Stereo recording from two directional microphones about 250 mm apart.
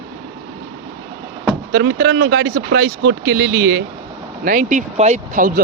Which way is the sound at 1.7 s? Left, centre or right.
Right.